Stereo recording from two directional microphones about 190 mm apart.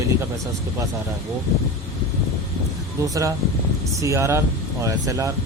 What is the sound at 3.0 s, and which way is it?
Speech, 15° right (ahead or behind).